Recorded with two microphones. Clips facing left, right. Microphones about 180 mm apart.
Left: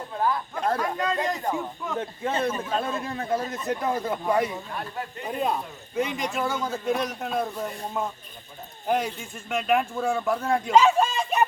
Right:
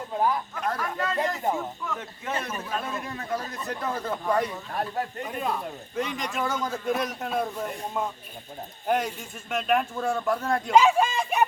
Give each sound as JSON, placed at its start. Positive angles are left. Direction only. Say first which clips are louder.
{"t": 0.5, "sound": "speech", "louder": "left 4 dB", "side_deg": 30}
{"t": 0.8, "sound": "a man's voice", "louder": "left 1 dB", "side_deg": 15}
{"t": 2.0, "sound": "a man's voice", "louder": "left 6 dB", "side_deg": 30}
{"t": 4.7, "sound": "speech", "louder": "right 4 dB", "side_deg": -40}
{"t": 5.9, "sound": "a man's voice", "louder": "left 4 dB", "side_deg": 5}
{"t": 11.2, "sound": "a sound", "louder": "left 1 dB", "side_deg": -5}